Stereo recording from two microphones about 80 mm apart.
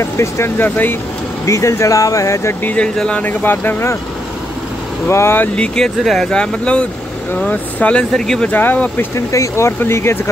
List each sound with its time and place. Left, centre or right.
0.0 s speech: left
0.7 s speech: left
1.4 s speech: left
2.6 s speech: centre
3.3 s speech: left
5.0 s speech: left
5.6 s speech: centre
8.5 s speech: left
9.1 s speech: left